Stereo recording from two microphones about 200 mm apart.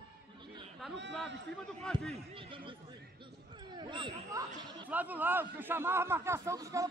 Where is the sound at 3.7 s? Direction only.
25° right (ahead or behind).